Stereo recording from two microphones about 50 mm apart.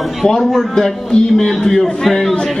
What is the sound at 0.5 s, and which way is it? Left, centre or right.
Speech, centre.